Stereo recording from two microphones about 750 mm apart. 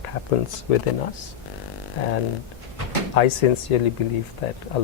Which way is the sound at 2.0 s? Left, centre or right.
Left.